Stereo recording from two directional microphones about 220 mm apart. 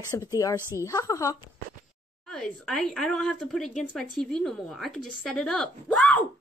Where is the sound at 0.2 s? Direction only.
15° left (ahead or behind).